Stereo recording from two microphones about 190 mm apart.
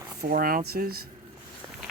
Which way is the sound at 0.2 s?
50° right (ahead or behind).